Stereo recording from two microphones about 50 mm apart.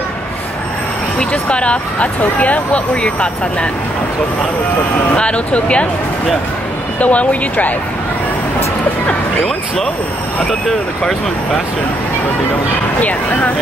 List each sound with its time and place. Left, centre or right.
1.3 s speech: left
5.1 s speech: left
7.0 s speech: left
13.0 s speech: left